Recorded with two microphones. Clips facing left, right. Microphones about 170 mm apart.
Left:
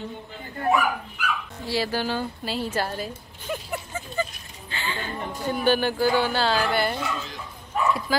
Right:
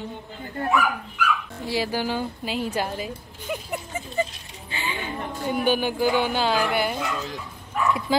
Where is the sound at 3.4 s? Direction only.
15° right (ahead or behind).